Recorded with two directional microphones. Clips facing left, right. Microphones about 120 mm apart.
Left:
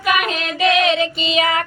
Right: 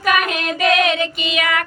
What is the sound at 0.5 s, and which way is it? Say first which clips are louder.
Speech: left 1 dB; 40° right (ahead or behind).